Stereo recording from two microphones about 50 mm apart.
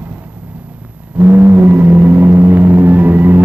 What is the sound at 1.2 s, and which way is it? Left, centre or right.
Vehicle, right.